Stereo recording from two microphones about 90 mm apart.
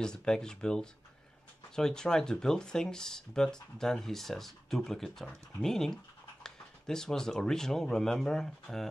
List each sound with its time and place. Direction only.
0.0 s speech: 10° left (ahead or behind)